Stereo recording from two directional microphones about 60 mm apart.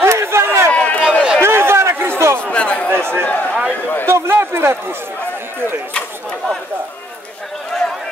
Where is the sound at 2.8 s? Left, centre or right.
Right.